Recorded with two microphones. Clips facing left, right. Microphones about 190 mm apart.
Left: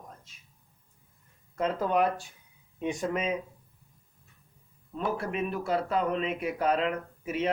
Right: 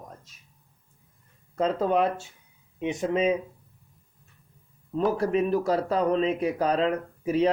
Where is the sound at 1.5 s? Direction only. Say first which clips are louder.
Right 3 dB; 30° right (ahead or behind).